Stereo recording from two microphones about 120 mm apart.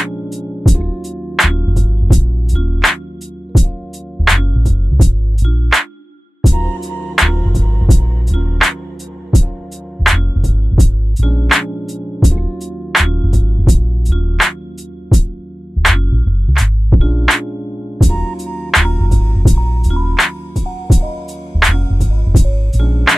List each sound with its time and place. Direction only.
0.0 s music: centre (ahead or behind)
10.0 s music: centre (ahead or behind)